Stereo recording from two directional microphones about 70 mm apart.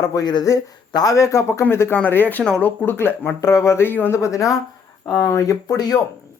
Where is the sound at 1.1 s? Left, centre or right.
Left.